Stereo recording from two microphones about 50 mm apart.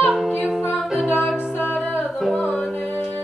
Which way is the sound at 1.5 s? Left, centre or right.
Left.